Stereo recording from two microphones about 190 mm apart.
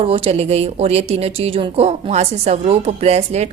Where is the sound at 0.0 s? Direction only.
30° right (ahead or behind).